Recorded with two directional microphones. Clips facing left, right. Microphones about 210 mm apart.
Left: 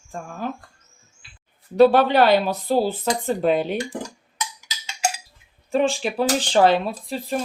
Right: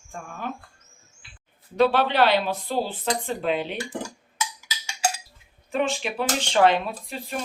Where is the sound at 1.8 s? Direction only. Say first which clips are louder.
Left 5 dB; 45° left (ahead or behind).